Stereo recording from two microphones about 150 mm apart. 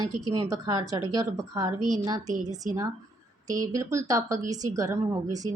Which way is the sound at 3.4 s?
25° right (ahead or behind).